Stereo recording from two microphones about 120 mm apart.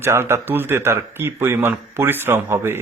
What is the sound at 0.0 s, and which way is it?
Speech, 20° right (ahead or behind).